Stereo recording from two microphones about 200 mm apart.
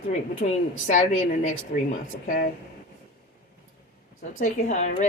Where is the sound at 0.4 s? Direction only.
50° left (ahead or behind).